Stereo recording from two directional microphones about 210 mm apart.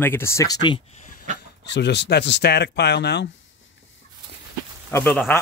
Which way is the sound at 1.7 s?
55° left (ahead or behind).